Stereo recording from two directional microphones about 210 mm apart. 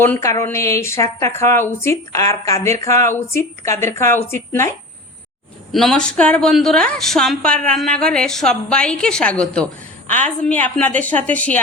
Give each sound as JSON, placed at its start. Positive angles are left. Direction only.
{"t": 0.0, "sound": "speech", "side_deg": 10}
{"t": 5.7, "sound": "a woman's voice", "side_deg": 0}